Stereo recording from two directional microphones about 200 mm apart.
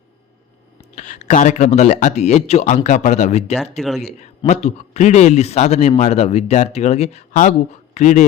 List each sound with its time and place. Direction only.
0.9 s speech: 35° left (ahead or behind)
3.6 s speech: centre (ahead or behind)
4.0 s speech: 35° left (ahead or behind)